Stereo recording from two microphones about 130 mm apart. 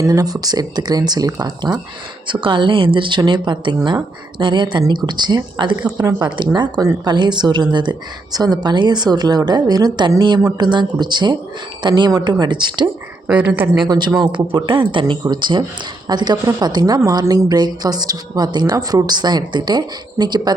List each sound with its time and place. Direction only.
0.0 s a woman's voice: 25° right (ahead or behind)
13.2 s a woman's voice: 10° right (ahead or behind)
13.8 s a woman's voice: 30° right (ahead or behind)